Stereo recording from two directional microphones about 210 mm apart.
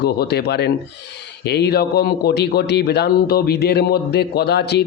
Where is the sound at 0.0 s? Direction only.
50° left (ahead or behind).